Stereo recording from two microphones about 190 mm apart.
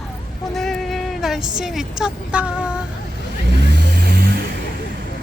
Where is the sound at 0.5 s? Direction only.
Centre (ahead or behind).